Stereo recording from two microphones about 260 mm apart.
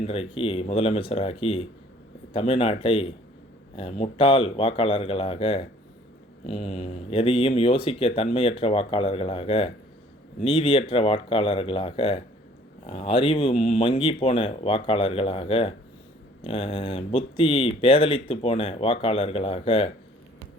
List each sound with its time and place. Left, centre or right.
0.0 s speech: left